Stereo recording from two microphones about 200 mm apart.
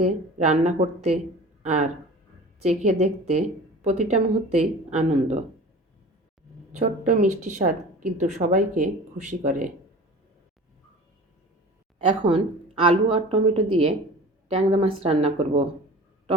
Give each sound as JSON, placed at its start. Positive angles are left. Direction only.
{"t": 0.0, "sound": "a woman's voice", "side_deg": -35}
{"t": 6.7, "sound": "a woman's voice", "side_deg": -40}
{"t": 12.8, "sound": "a woman's voice", "side_deg": -30}